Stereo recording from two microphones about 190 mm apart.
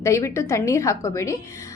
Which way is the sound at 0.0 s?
15° left (ahead or behind).